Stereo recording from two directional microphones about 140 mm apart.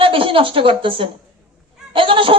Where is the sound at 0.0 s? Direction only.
40° right (ahead or behind).